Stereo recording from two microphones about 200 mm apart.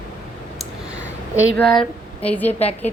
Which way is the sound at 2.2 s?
5° left (ahead or behind).